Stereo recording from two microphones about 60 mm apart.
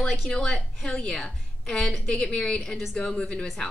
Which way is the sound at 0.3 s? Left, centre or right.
Centre.